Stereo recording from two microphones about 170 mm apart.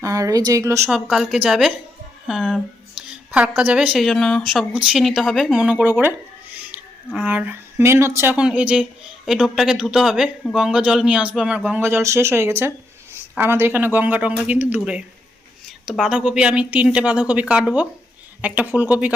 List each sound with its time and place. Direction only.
0.0 s speech: 20° right (ahead or behind)
0.9 s a woman's voice: 5° right (ahead or behind)